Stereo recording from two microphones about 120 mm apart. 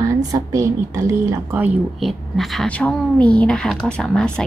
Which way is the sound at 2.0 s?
Centre (ahead or behind).